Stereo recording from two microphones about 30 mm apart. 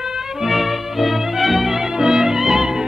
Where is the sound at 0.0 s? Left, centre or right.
Centre.